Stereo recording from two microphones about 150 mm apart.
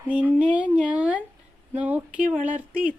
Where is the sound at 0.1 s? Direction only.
10° right (ahead or behind).